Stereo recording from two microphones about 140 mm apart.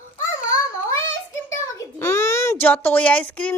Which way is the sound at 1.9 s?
20° left (ahead or behind).